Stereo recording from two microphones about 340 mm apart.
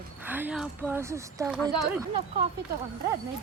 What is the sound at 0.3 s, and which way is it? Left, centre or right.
Speech, centre.